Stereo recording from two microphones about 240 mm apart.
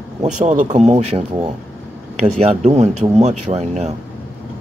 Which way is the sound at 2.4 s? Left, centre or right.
Right.